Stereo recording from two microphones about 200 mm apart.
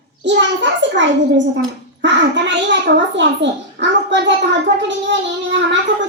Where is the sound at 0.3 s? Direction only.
60° right (ahead or behind).